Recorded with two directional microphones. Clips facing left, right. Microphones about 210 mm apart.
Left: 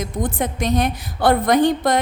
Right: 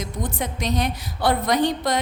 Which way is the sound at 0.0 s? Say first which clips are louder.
Left 5 dB; 50° left (ahead or behind).